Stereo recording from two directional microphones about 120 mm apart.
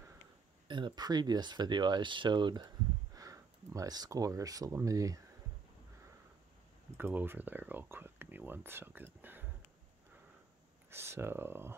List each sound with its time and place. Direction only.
0.7 s speech: 40° right (ahead or behind)
3.2 s speech: 30° right (ahead or behind)
7.0 s speech: 15° right (ahead or behind)
10.9 s speech: 20° right (ahead or behind)